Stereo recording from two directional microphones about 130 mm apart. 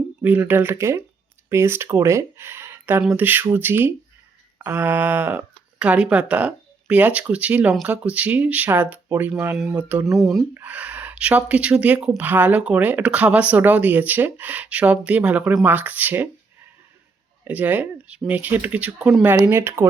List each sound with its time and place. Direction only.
0.2 s speech: 15° right (ahead or behind)
10.1 s speech: centre (ahead or behind)
10.5 s speech: 10° right (ahead or behind)
17.4 s speech: 15° right (ahead or behind)